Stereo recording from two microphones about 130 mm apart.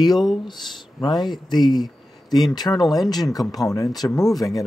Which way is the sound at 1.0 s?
35° left (ahead or behind).